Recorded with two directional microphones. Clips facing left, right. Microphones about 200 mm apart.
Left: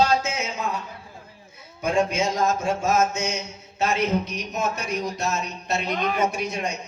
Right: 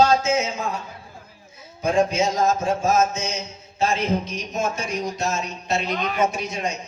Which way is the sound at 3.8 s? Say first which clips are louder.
Right 1 dB; 70° left (ahead or behind).